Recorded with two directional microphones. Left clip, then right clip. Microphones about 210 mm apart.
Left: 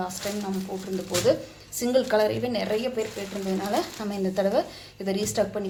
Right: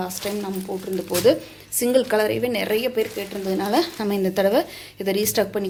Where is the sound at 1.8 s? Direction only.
20° right (ahead or behind); by 5.6 s 40° right (ahead or behind).